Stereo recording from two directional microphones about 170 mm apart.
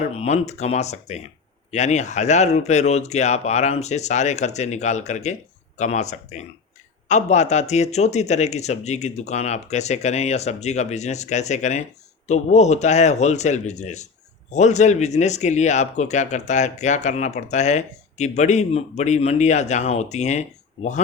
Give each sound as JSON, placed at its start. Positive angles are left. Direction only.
{"t": 0.2, "sound": "speech", "side_deg": 40}